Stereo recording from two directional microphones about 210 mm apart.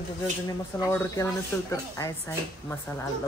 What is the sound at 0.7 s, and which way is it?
Speech, 15° left (ahead or behind).